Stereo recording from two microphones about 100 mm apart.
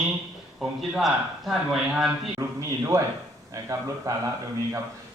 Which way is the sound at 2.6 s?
35° right (ahead or behind).